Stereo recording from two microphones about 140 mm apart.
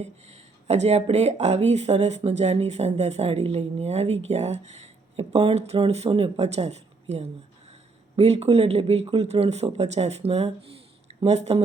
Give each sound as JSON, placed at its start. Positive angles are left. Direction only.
{"t": 0.0, "sound": "speech", "side_deg": -50}
{"t": 5.3, "sound": "speech", "side_deg": -40}